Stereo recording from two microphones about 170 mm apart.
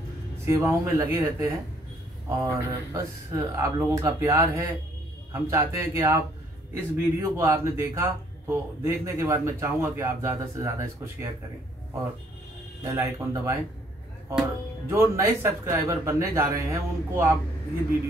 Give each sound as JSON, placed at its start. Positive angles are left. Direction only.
{"t": 0.5, "sound": "speech", "side_deg": -20}
{"t": 12.8, "sound": "speech", "side_deg": -15}
{"t": 14.9, "sound": "speech", "side_deg": -15}